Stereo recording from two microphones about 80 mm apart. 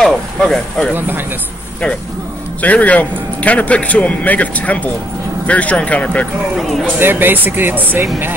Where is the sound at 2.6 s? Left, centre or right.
Centre.